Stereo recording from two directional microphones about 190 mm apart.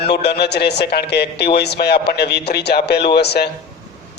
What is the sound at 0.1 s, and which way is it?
Speech, 60° left (ahead or behind).